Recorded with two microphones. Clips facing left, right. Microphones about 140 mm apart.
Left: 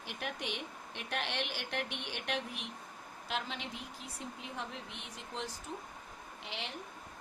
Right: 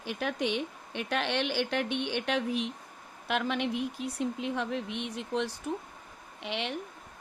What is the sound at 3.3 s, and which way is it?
Speech, 65° right (ahead or behind).